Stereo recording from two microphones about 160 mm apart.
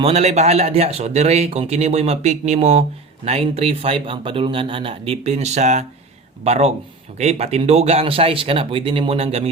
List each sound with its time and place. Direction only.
0.0 s speech: 45° right (ahead or behind)